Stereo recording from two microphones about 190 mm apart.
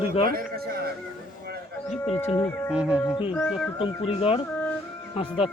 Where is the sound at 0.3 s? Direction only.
50° right (ahead or behind).